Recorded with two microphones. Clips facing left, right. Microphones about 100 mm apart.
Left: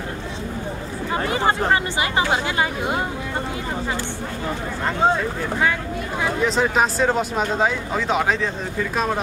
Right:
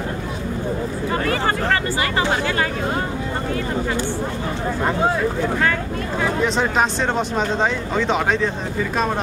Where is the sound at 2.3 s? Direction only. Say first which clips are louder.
Right 1 dB; 15° left (ahead or behind).